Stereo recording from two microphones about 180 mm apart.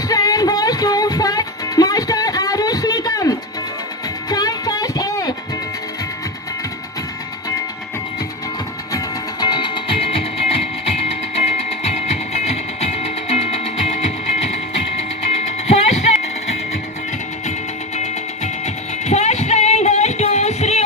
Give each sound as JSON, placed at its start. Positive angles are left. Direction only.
{"t": 0.1, "sound": "music", "side_deg": 20}
{"t": 9.4, "sound": "music", "side_deg": 25}
{"t": 15.4, "sound": "music", "side_deg": 40}
{"t": 17.9, "sound": "music", "side_deg": 40}